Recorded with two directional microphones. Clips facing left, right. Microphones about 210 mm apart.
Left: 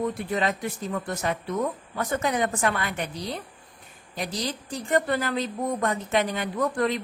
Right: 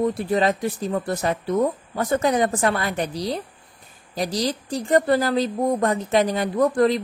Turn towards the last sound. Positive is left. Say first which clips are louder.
# right 7 dB
turn(degrees=-35)  # may be behind; listen again after turning